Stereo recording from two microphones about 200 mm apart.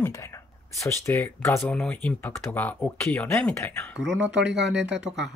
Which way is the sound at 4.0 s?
65° right (ahead or behind).